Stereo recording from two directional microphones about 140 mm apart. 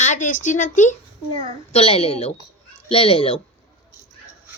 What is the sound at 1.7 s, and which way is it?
Speech, 45° left (ahead or behind).